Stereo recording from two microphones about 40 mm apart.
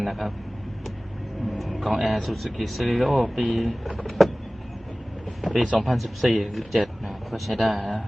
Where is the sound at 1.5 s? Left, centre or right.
Centre.